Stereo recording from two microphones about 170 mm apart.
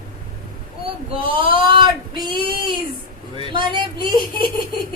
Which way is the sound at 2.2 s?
30° right (ahead or behind).